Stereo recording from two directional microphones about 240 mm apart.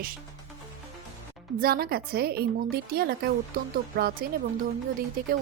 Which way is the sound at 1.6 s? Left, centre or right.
Right.